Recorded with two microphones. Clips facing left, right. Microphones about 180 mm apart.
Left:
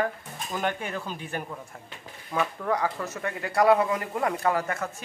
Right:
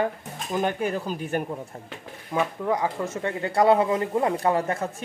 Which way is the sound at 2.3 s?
15° right (ahead or behind).